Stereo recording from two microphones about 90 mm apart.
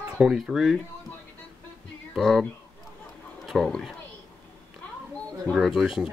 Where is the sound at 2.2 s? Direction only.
Centre (ahead or behind).